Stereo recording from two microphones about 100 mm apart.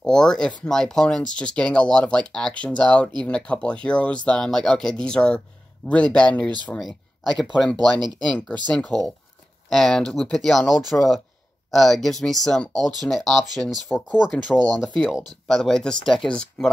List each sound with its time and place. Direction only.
0.0 s speech: 5° left (ahead or behind)
9.7 s speech: 5° left (ahead or behind)
13.9 s speech: 15° left (ahead or behind)
14.5 s speech: centre (ahead or behind)